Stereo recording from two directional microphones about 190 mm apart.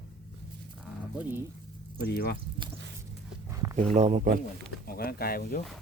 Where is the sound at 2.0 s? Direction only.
55° left (ahead or behind).